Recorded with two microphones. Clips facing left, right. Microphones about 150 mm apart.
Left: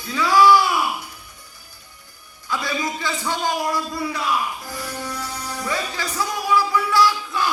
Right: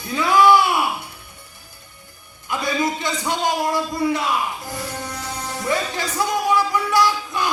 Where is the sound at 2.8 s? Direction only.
20° right (ahead or behind).